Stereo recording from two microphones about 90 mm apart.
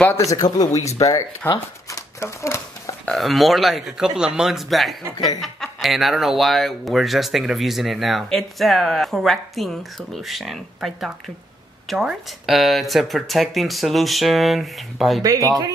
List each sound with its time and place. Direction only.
0.3 s speech: 40° left (ahead or behind)
1.5 s a sound: 40° left (ahead or behind)
3.2 s speech: centre (ahead or behind)
15.2 s speech: 45° right (ahead or behind)